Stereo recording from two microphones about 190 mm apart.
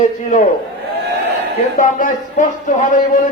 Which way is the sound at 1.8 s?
45° left (ahead or behind).